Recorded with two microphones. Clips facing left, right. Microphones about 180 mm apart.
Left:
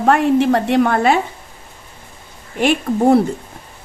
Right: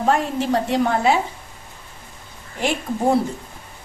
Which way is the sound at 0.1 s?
65° left (ahead or behind).